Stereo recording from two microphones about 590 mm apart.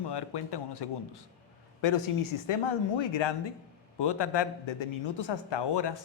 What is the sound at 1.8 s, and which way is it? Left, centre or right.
A man's voice, left.